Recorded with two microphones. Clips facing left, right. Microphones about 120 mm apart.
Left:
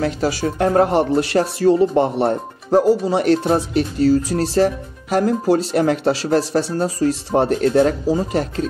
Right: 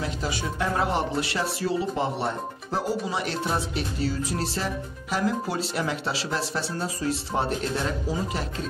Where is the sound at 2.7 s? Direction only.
45° left (ahead or behind).